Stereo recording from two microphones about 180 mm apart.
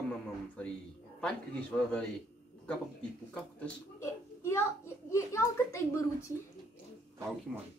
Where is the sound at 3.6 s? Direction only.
15° left (ahead or behind).